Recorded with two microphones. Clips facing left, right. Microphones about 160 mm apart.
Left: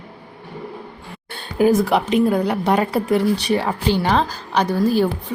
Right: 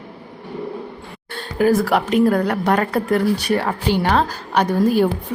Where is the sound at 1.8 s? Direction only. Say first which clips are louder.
Right 1 dB; centre (ahead or behind).